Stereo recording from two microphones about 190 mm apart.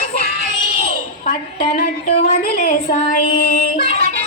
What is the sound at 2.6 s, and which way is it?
Female singing, 45° left (ahead or behind).